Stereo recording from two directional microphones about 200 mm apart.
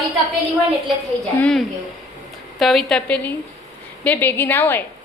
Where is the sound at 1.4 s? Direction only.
5° left (ahead or behind).